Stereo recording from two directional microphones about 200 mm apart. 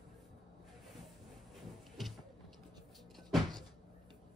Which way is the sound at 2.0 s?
Centre (ahead or behind).